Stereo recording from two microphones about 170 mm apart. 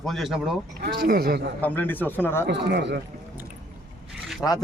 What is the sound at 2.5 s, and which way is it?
Speech, 80° right.